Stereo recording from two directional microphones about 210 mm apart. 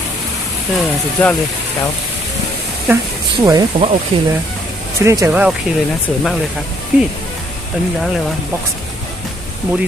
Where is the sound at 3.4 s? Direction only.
20° right (ahead or behind).